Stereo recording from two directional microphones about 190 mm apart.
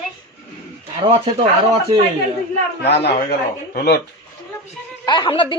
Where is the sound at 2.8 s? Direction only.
60° left (ahead or behind).